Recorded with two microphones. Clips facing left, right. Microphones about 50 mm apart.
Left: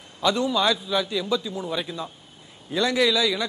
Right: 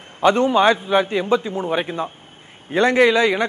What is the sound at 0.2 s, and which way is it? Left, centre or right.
A man's voice, right.